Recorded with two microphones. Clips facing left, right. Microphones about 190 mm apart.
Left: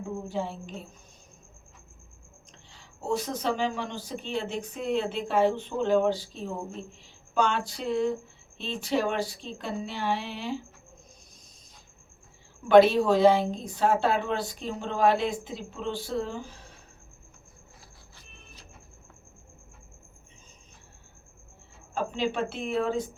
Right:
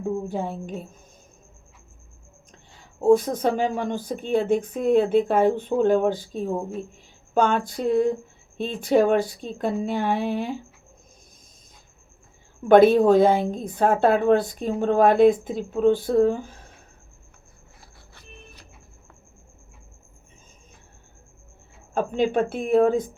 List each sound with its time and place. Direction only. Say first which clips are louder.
0.3 s speech: right 4 dB; 50° right (ahead or behind)
3.0 s speech: right 11 dB; 50° right (ahead or behind)
12.6 s speech: right 4 dB; 50° right (ahead or behind)
21.9 s speech: right 7 dB; 50° right (ahead or behind)